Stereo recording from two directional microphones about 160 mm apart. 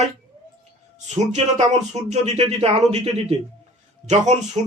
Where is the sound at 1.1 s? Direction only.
45° right (ahead or behind).